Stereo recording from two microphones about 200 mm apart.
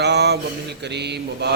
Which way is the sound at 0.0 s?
55° right (ahead or behind).